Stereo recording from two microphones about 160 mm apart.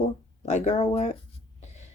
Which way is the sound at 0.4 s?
45° left (ahead or behind).